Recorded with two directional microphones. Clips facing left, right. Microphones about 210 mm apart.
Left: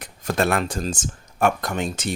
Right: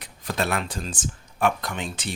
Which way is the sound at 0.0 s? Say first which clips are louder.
Left 5 dB; 45° left (ahead or behind).